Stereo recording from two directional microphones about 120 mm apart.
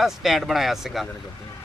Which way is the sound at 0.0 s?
Centre (ahead or behind).